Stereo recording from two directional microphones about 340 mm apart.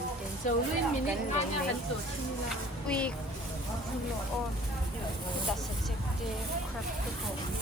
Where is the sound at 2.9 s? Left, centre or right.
Centre.